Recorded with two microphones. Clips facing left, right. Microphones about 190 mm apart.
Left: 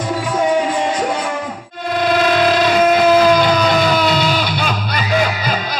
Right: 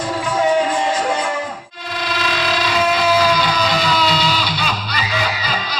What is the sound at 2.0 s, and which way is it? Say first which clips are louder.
Guitar: left 8 dB; 50° left (ahead or behind).